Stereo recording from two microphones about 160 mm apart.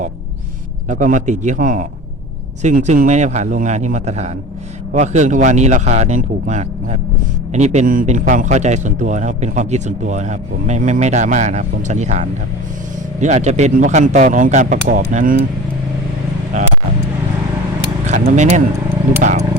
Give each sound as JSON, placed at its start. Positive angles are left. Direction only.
{"t": 0.9, "sound": "a man's voice", "side_deg": -50}
{"t": 7.5, "sound": "a man's voice", "side_deg": -45}
{"t": 18.0, "sound": "a man's voice", "side_deg": -50}